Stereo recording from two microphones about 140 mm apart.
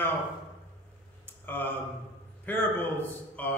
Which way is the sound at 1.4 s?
15° left (ahead or behind).